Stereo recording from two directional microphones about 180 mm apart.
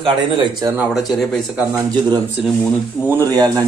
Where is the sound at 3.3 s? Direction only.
20° right (ahead or behind).